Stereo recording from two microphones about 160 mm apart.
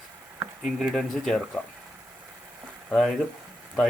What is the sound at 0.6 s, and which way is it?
Speech, centre (ahead or behind).